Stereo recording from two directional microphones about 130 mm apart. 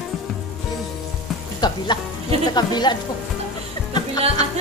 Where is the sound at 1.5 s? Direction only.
35° left (ahead or behind).